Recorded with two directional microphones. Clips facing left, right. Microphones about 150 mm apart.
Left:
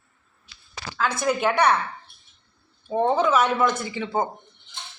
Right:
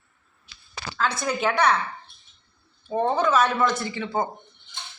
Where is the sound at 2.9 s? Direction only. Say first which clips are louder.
Left 1 dB; 10° left (ahead or behind).